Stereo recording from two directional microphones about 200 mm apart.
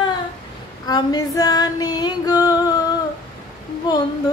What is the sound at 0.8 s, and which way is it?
Female singing, 20° left (ahead or behind).